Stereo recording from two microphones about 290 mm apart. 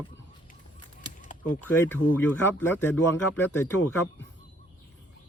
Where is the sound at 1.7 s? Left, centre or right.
Centre.